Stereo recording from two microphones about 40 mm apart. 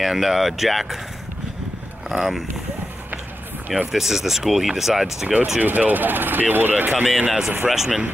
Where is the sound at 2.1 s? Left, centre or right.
Centre.